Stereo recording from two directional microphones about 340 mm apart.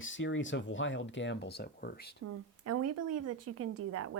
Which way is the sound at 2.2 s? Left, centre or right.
Right.